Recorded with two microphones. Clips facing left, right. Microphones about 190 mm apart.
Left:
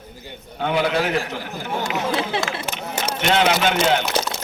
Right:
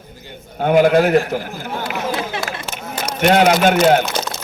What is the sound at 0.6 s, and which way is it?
Speech, 45° right (ahead or behind).